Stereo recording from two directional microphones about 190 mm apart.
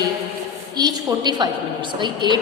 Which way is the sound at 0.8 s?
20° right (ahead or behind).